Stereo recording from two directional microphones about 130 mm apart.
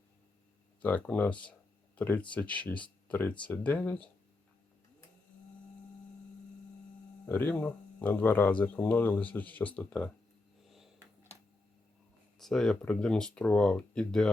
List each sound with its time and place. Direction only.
0.8 s speech: 10° left (ahead or behind)
7.3 s speech: 15° left (ahead or behind)
12.4 s speech: 5° left (ahead or behind)